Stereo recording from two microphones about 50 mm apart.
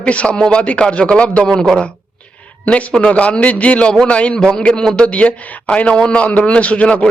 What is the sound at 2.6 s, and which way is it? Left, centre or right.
A man's voice, left.